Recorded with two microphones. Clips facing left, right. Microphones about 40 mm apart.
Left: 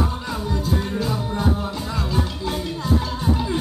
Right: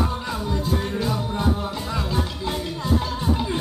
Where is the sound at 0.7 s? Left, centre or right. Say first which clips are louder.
Left 2 dB; right.